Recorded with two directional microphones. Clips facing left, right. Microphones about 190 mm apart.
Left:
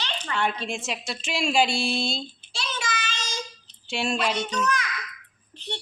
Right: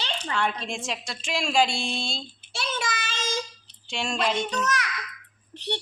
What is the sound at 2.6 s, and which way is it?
Child singing, 55° right (ahead or behind).